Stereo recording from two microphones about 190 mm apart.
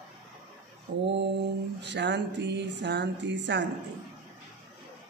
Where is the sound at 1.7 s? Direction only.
65° right (ahead or behind).